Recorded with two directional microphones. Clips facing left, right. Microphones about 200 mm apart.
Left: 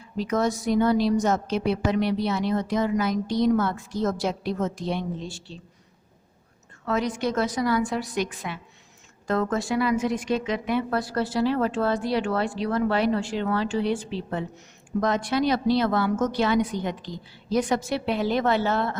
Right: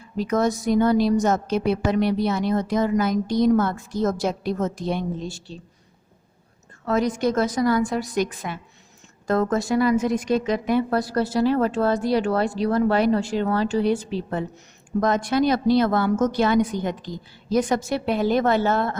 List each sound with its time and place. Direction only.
0.2 s a woman's voice: 45° right (ahead or behind)
6.8 s a woman's voice: 40° right (ahead or behind)